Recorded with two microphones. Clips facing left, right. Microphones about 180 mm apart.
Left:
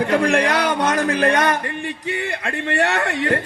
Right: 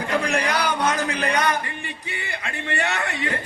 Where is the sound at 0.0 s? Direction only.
50° left (ahead or behind).